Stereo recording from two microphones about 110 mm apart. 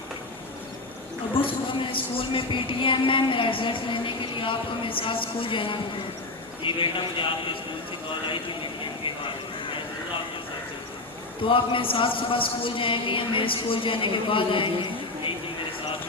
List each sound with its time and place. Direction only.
1.4 s speech: 55° left (ahead or behind)
11.4 s speech: 50° left (ahead or behind)